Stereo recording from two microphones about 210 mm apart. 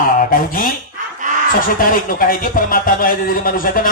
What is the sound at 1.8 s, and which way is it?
Speech, 40° left (ahead or behind).